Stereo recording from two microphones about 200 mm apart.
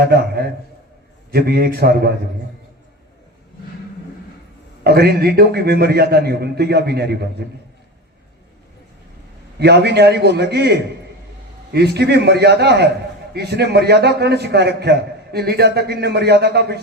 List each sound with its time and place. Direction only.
0.1 s a man's voice: 50° right (ahead or behind)
4.8 s a man's voice: 50° right (ahead or behind)
9.6 s a man's voice: 55° right (ahead or behind)